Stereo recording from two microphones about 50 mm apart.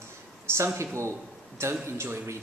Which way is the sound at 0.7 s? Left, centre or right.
Right.